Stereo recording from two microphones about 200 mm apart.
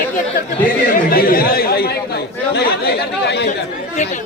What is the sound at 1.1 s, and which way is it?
Speech, 45° left (ahead or behind).